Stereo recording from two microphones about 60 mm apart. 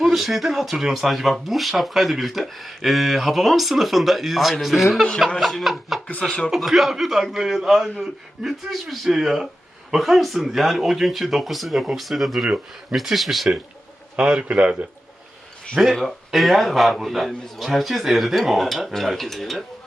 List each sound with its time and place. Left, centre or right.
0.0 s speech: centre
14.2 s a man's voice: centre
16.0 s speech: centre